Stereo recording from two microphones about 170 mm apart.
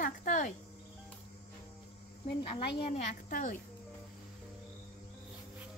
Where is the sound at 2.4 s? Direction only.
30° left (ahead or behind).